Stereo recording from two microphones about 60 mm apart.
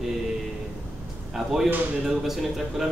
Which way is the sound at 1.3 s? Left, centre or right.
Centre.